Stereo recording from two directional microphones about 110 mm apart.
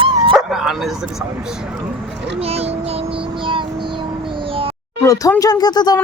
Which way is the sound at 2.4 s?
70° right (ahead or behind).